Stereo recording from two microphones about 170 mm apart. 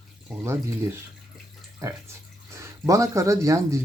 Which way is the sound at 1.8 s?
20° right (ahead or behind).